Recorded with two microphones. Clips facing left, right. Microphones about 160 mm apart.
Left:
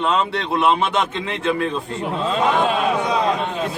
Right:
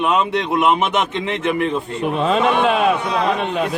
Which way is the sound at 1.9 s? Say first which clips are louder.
Right 4 dB; 70° right (ahead or behind).